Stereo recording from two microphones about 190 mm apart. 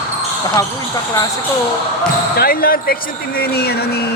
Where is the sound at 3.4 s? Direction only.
55° left (ahead or behind).